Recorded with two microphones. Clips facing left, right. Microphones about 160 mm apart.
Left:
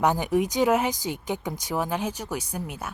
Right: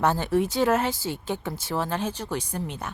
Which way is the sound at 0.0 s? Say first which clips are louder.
Even; 15° left (ahead or behind).